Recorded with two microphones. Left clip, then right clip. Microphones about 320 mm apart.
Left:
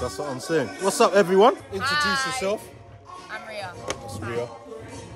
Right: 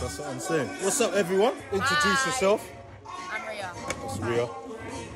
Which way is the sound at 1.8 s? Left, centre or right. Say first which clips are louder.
Left 1 dB; centre.